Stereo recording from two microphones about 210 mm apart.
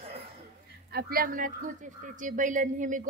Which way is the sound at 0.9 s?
45° right (ahead or behind).